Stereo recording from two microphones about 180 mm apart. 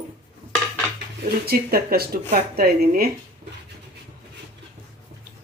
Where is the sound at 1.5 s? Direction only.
60° right (ahead or behind).